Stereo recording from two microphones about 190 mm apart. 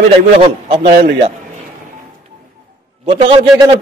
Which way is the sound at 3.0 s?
25° right (ahead or behind).